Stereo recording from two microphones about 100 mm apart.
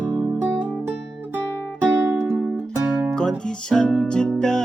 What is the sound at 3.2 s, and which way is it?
Music, 5° left (ahead or behind).